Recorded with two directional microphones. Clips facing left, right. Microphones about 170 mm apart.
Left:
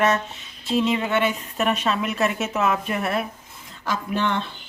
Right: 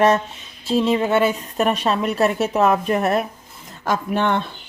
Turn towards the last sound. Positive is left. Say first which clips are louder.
# right 4 dB
turn(degrees=-50)  # may be behind; listen again after turning